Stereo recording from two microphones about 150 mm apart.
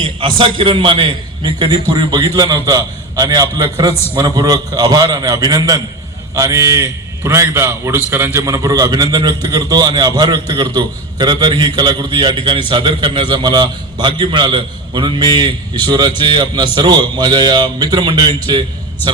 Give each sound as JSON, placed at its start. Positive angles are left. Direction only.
{"t": 0.0, "sound": "a man's voice", "side_deg": -35}